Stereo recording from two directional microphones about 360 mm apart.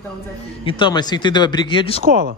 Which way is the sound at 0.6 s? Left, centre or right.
Centre.